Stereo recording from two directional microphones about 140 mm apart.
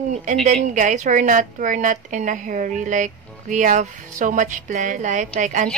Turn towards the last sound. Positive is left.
turn(degrees=-60)  # may be behind; listen again after turning